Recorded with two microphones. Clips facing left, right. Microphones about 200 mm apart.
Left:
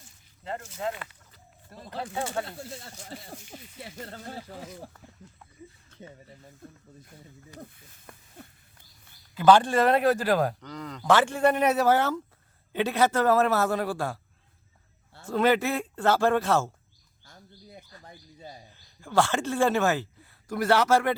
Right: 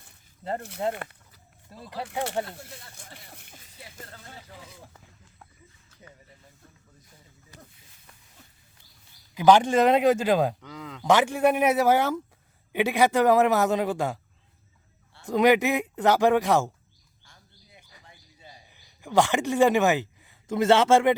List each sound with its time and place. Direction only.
0.8 s speech: 35° right (ahead or behind)
2.4 s speech: 20° right (ahead or behind)
3.0 s speech: 55° right (ahead or behind)
3.8 s speech: 30° left (ahead or behind)
7.6 s a sound: 55° left (ahead or behind)
9.3 s speech: 15° right (ahead or behind)
10.6 s speech: 5° right (ahead or behind)
11.0 s speech: 15° right (ahead or behind)
15.2 s speech: 15° right (ahead or behind)
17.2 s bird: 40° left (ahead or behind)
18.0 s a sound: 40° left (ahead or behind)
18.7 s speech: 15° right (ahead or behind)